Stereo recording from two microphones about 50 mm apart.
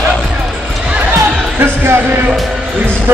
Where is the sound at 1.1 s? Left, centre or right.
Right.